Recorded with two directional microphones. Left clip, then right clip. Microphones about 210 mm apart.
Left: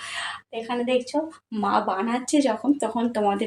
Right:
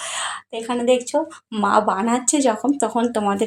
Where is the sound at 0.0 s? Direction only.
35° right (ahead or behind).